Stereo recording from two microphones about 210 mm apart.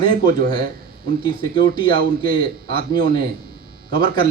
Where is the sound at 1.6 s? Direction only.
45° right (ahead or behind).